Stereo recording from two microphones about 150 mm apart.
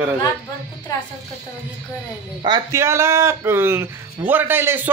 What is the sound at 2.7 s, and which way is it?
Speech, 20° right (ahead or behind).